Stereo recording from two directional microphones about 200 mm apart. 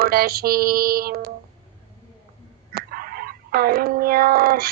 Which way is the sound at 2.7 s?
45° right (ahead or behind).